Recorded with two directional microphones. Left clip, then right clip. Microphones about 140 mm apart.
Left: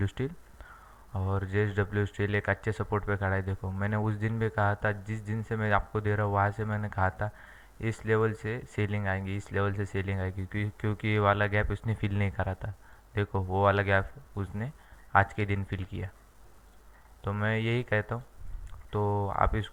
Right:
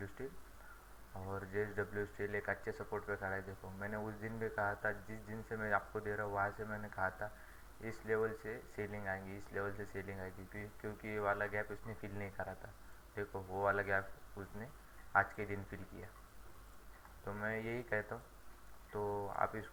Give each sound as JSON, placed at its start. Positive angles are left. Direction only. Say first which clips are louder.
{"t": 0.0, "sound": "speech", "louder": "left 12 dB", "side_deg": 50}
{"t": 1.3, "sound": "speech", "louder": "left 9 dB", "side_deg": 45}
{"t": 17.2, "sound": "speech", "louder": "left 10 dB", "side_deg": 50}